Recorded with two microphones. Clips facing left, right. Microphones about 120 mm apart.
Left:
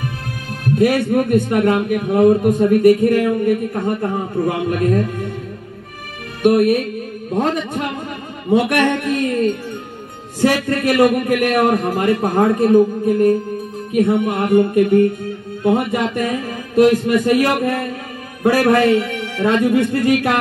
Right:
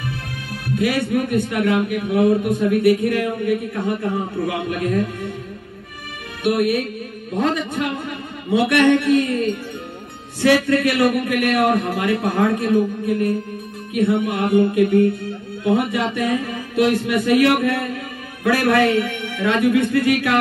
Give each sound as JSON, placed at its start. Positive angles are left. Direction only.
{"t": 0.7, "sound": "a man's voice", "side_deg": 45}
{"t": 6.4, "sound": "a man's voice", "side_deg": 45}